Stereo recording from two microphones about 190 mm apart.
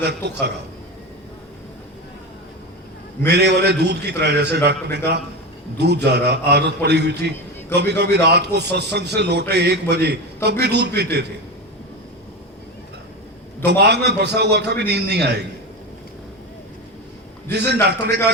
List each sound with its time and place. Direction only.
0.0 s a man's voice: 60° right (ahead or behind)
3.2 s a man's voice: 60° right (ahead or behind)
13.7 s a man's voice: 60° right (ahead or behind)
17.8 s a man's voice: 60° right (ahead or behind)